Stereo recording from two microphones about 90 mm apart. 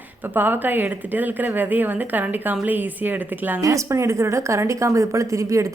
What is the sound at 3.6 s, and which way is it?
Speech, 35° right (ahead or behind).